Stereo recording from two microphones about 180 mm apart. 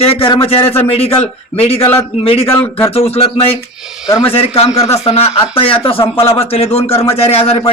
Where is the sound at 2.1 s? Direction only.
35° left (ahead or behind).